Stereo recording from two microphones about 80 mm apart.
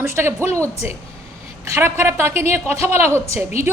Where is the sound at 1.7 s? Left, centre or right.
Right.